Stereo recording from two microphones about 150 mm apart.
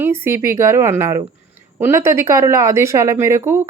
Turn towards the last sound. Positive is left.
turn(degrees=-15)  # may be behind; listen again after turning